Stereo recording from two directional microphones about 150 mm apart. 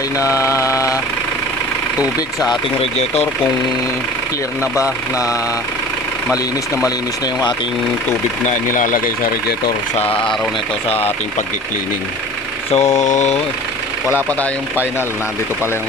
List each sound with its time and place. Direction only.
0.2 s mantra: 20° left (ahead or behind)
2.1 s speech: 25° left (ahead or behind)
2.8 s mantra: 45° left (ahead or behind)
4.8 s speech: 20° left (ahead or behind)
8.7 s speech: 60° left (ahead or behind); by 9.7 s 85° left
9.9 s speech: 40° left (ahead or behind)
12.7 s mantra: 50° left (ahead or behind)
14.1 s speech: 15° left (ahead or behind)